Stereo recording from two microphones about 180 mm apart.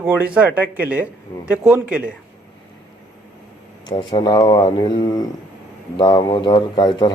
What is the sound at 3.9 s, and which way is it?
Speech, 25° left (ahead or behind).